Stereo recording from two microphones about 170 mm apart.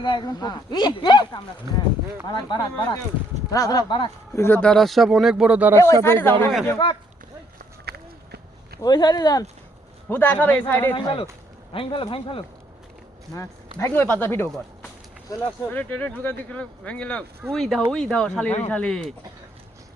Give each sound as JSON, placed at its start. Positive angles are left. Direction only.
{"t": 0.0, "sound": "speech", "side_deg": 25}
{"t": 4.4, "sound": "speech", "side_deg": 10}
{"t": 5.9, "sound": "speech", "side_deg": 15}
{"t": 6.8, "sound": "speech", "side_deg": 25}
{"t": 7.9, "sound": "a sound", "side_deg": -70}
{"t": 8.8, "sound": "speech", "side_deg": 25}
{"t": 10.1, "sound": "speech", "side_deg": 10}
{"t": 10.9, "sound": "speech", "side_deg": 30}
{"t": 13.3, "sound": "speech", "side_deg": 15}